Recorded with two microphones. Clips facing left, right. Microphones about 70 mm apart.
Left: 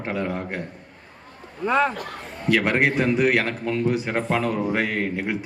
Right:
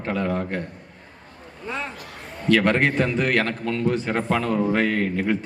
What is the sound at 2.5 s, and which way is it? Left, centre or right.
A man's voice, centre.